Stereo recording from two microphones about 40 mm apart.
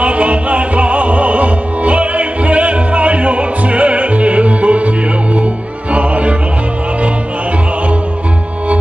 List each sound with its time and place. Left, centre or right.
0.0 s music: right